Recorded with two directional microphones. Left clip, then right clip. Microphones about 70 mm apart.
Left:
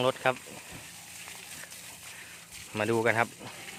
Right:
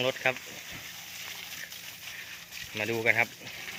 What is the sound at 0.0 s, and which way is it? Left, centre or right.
Speech, left.